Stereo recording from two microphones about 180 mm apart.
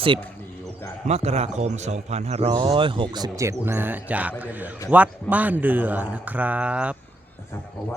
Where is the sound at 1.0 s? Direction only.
35° right (ahead or behind); by 6.9 s 5° right (ahead or behind).